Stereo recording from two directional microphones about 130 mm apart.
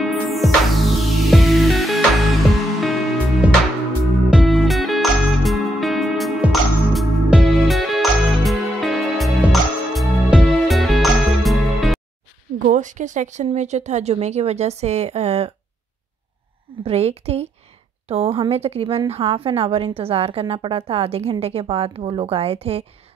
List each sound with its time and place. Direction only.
0.0 s music: centre (ahead or behind)
12.6 s a woman's voice: 75° right (ahead or behind); by 15.5 s 55° right (ahead or behind)
16.8 s a woman's voice: 50° right (ahead or behind)